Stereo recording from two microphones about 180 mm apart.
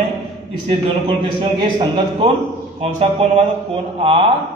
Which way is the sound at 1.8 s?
25° right (ahead or behind).